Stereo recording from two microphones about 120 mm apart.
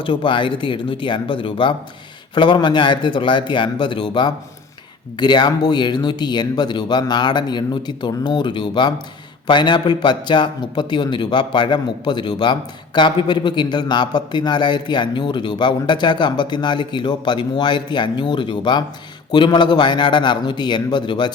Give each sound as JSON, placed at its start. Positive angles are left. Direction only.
{"t": 0.0, "sound": "a man's voice", "side_deg": 45}